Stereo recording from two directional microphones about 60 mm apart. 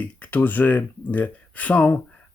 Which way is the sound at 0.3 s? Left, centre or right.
Left.